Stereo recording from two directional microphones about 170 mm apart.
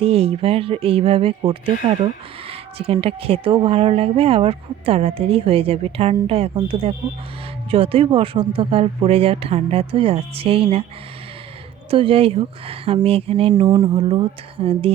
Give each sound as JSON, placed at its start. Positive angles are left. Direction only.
{"t": 0.0, "sound": "speech", "side_deg": -35}
{"t": 11.9, "sound": "speech", "side_deg": -35}